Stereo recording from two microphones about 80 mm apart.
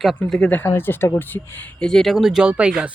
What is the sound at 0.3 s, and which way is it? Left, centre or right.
Speech, centre.